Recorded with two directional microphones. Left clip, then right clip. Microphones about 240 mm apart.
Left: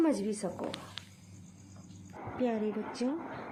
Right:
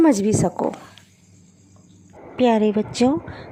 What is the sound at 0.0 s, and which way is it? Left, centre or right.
Speech, right.